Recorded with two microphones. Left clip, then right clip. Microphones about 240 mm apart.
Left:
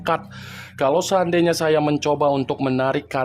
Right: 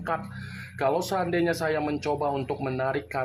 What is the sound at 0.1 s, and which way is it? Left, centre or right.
Speech, left.